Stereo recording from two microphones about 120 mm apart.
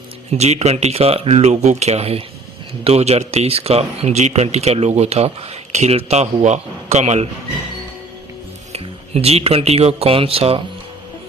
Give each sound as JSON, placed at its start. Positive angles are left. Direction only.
{"t": 0.3, "sound": "speech", "side_deg": -65}
{"t": 8.7, "sound": "speech", "side_deg": -55}